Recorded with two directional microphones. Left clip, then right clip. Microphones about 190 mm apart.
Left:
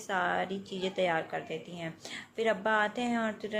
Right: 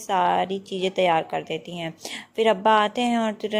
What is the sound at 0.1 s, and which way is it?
Speech, 30° right (ahead or behind).